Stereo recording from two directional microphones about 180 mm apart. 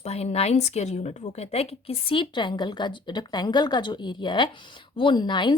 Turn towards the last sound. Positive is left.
turn(degrees=25)  # may be behind; listen again after turning